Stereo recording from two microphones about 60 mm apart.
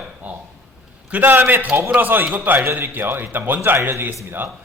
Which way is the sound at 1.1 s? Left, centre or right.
Right.